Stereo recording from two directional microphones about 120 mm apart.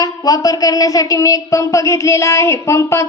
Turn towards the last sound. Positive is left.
turn(degrees=25)  # may be behind; listen again after turning